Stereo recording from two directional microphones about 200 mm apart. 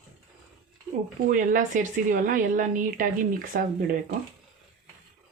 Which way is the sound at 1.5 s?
40° right (ahead or behind).